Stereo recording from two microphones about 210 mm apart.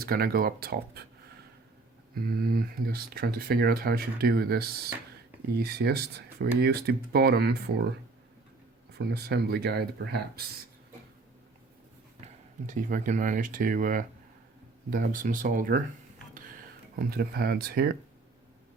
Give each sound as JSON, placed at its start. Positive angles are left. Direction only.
{"t": 0.0, "sound": "speech", "side_deg": -45}
{"t": 2.2, "sound": "speech", "side_deg": -45}
{"t": 9.0, "sound": "speech", "side_deg": -50}
{"t": 12.2, "sound": "speech", "side_deg": -35}
{"t": 17.0, "sound": "speech", "side_deg": -45}